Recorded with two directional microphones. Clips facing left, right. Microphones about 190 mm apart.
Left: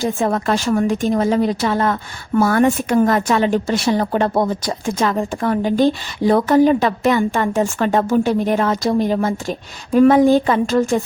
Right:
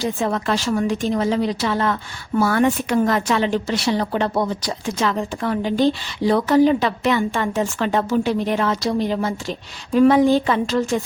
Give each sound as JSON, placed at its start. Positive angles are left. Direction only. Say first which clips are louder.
{"t": 0.0, "sound": "a woman's voice", "louder": "left 3 dB", "side_deg": 50}